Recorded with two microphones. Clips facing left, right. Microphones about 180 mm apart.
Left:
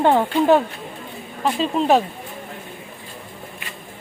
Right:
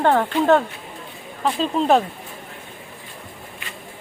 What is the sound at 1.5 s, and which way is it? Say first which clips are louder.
Speech: even; 5° left (ahead or behind).